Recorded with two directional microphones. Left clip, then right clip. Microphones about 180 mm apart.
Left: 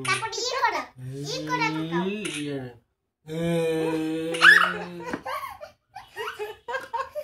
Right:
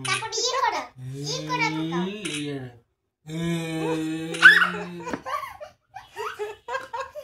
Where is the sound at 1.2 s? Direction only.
10° left (ahead or behind).